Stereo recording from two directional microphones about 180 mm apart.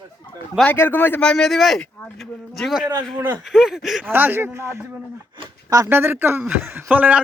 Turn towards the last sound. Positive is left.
turn(degrees=-10)  # may be behind; listen again after turning